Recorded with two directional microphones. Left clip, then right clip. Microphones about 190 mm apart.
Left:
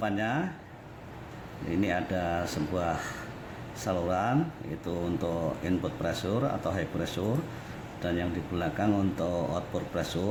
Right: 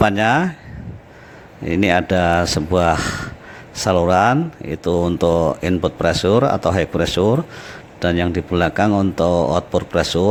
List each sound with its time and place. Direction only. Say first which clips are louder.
0.0 s speech: right 15 dB; 45° right (ahead or behind)
1.7 s speech: right 14 dB; 45° right (ahead or behind)